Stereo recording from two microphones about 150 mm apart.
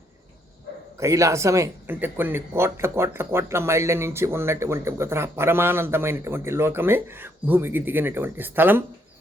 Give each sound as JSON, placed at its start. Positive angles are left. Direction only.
{"t": 0.9, "sound": "speech", "side_deg": -20}